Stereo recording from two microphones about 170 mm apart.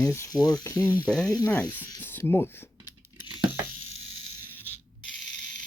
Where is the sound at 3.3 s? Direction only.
10° right (ahead or behind).